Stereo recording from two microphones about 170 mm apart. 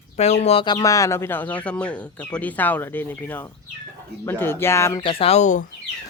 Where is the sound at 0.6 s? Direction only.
20° left (ahead or behind).